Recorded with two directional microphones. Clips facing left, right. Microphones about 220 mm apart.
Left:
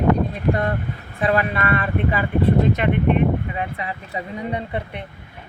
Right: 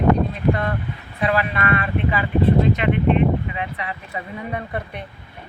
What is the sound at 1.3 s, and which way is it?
Speech, 35° left (ahead or behind).